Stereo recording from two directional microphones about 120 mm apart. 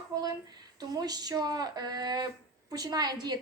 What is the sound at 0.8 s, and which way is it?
Speech, 35° right (ahead or behind).